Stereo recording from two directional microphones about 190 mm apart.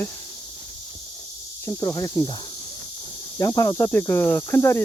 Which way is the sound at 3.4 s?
15° left (ahead or behind).